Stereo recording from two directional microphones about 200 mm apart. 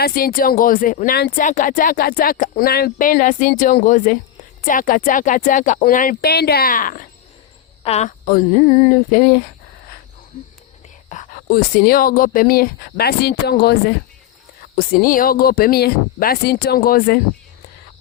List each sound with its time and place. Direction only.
0.0 s speech: 50° left (ahead or behind)
11.1 s speech: 40° left (ahead or behind)